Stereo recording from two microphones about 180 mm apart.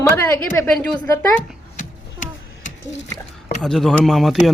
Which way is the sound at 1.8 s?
45° left (ahead or behind).